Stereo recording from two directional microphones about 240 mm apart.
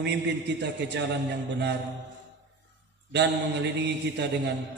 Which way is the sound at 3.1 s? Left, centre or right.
Right.